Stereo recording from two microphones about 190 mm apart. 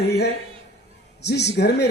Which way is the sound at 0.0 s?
60° left (ahead or behind).